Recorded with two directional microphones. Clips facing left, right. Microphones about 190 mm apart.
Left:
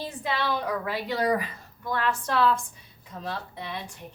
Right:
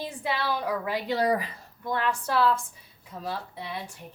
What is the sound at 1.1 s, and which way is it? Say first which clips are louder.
Speech: even; 30° right (ahead or behind).